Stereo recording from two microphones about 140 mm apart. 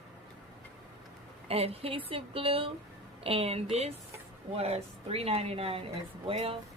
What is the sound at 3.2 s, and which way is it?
Speech, 45° right (ahead or behind).